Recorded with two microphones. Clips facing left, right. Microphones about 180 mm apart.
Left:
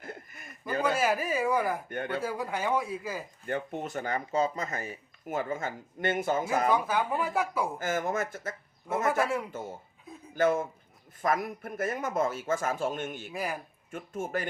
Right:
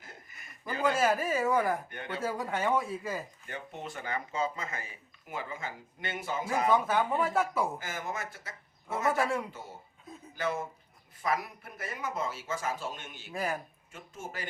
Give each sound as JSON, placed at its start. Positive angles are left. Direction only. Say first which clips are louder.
{"t": 0.0, "sound": "a sound", "louder": "left 9 dB", "side_deg": 55}
{"t": 0.9, "sound": "speech", "louder": "even", "side_deg": 5}
{"t": 1.9, "sound": "speech", "louder": "left 6 dB", "side_deg": 50}
{"t": 2.2, "sound": "speech", "louder": "even", "side_deg": 0}
{"t": 3.4, "sound": "speech", "louder": "left 8 dB", "side_deg": 50}
{"t": 6.7, "sound": "speech", "louder": "even", "side_deg": 0}
{"t": 7.8, "sound": "speech", "louder": "left 8 dB", "side_deg": 50}
{"t": 13.3, "sound": "speech", "louder": "right 2 dB", "side_deg": 0}
{"t": 13.9, "sound": "speech", "louder": "left 9 dB", "side_deg": 55}